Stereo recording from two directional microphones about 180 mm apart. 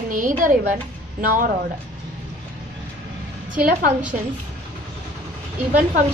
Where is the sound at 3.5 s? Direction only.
50° right (ahead or behind).